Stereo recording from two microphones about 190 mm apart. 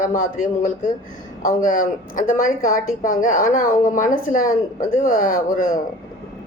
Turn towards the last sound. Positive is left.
turn(degrees=45)  # may be behind; listen again after turning